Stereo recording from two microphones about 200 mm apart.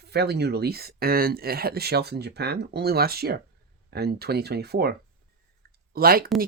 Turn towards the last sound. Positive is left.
turn(degrees=-50)  # may be behind; listen again after turning